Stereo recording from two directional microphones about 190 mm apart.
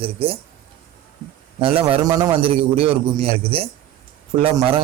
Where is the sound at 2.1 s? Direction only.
20° right (ahead or behind).